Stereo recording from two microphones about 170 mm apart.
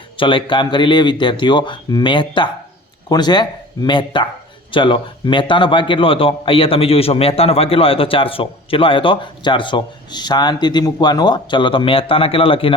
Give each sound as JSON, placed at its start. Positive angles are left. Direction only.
{"t": 0.2, "sound": "a man's voice", "side_deg": 30}